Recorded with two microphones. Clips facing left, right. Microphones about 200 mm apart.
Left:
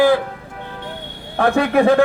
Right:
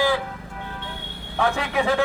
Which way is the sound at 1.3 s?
55° left (ahead or behind).